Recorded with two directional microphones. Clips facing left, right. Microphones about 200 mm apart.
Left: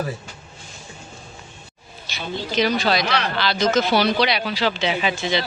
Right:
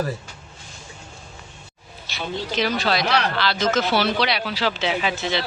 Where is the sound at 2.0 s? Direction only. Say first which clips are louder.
Even; centre (ahead or behind).